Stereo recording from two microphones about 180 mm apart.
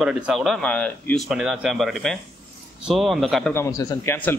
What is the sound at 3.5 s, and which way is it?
Speech, 15° left (ahead or behind).